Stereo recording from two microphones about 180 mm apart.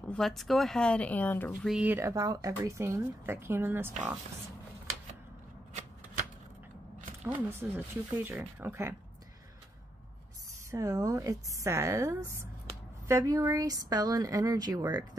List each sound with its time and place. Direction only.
0.1 s speech: centre (ahead or behind)
1.7 s speech: 10° right (ahead or behind)
7.2 s speech: 10° right (ahead or behind)
10.7 s speech: 20° right (ahead or behind)